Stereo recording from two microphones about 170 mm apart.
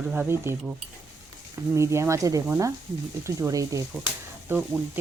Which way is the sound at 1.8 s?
15° right (ahead or behind).